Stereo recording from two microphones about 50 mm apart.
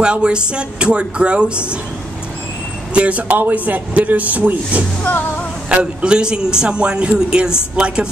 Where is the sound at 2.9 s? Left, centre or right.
Right.